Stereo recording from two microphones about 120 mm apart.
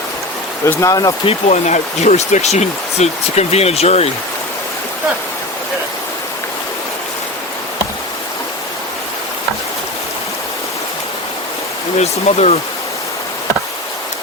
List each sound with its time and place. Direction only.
0.6 s speech: 25° left (ahead or behind)
1.2 s speech: 60° left (ahead or behind)
11.9 s speech: 65° left (ahead or behind)